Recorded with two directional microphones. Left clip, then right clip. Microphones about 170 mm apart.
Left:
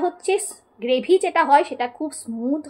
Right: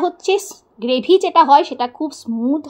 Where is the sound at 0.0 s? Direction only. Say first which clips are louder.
Right 4 dB; 25° right (ahead or behind).